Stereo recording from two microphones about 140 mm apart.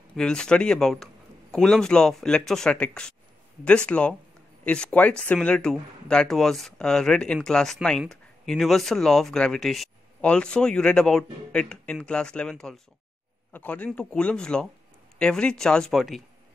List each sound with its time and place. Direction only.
0.1 s speech: 5° left (ahead or behind)